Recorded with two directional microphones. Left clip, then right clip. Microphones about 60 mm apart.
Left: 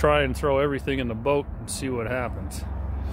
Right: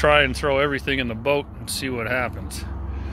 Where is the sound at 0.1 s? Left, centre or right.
Left.